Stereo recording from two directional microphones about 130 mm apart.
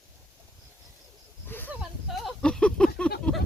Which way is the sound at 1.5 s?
15° left (ahead or behind).